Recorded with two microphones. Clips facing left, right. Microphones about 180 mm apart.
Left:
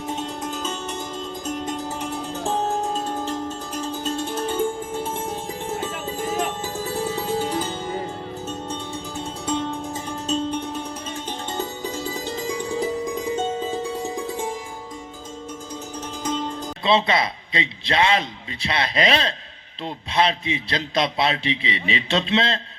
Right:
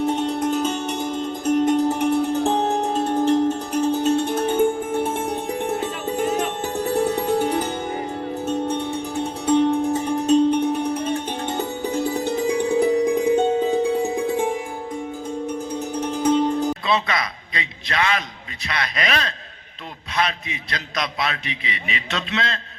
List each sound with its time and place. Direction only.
0.0 s music: 65° right (ahead or behind)
16.0 s music: 60° right (ahead or behind)
16.8 s a man's voice: 25° left (ahead or behind)